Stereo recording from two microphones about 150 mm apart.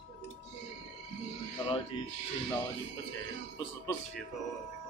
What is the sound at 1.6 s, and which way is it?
Speech, 35° left (ahead or behind).